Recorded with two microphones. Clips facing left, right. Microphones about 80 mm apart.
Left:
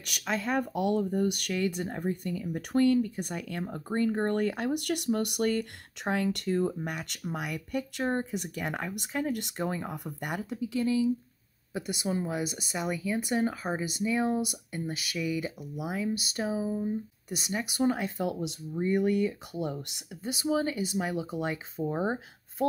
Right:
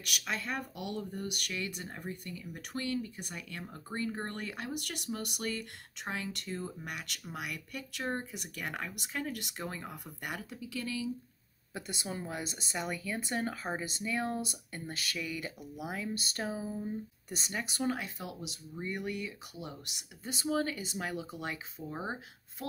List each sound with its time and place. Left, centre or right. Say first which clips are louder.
0.0 s speech: left 5 dB; left
0.7 s speech: left 12 dB; left
6.7 s speech: left 6 dB; left
11.7 s speech: left 8 dB; centre
17.8 s speech: left 9 dB; left
20.2 s speech: left 4 dB; centre